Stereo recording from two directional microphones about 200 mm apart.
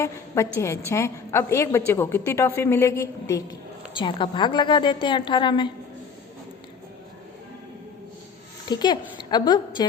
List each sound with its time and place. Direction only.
0.0 s a woman's voice: 15° left (ahead or behind)
8.7 s a woman's voice: 20° left (ahead or behind)